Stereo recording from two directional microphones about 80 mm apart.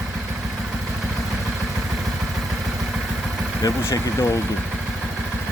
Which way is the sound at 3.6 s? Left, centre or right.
Left.